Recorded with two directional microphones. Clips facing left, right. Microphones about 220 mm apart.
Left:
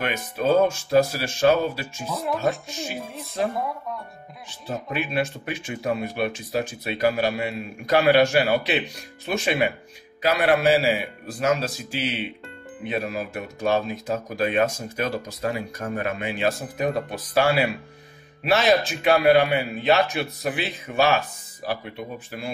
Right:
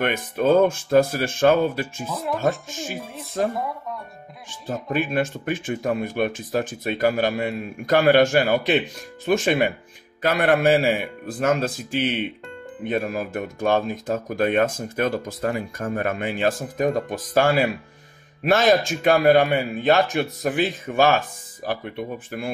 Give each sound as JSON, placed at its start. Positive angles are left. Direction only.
{"t": 0.0, "sound": "speech", "side_deg": -55}
{"t": 2.8, "sound": "music", "side_deg": 0}
{"t": 3.5, "sound": "speech", "side_deg": 0}
{"t": 4.5, "sound": "speech", "side_deg": -45}